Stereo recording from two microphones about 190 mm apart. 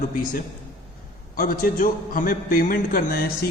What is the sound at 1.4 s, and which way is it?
A man's voice, 50° left (ahead or behind).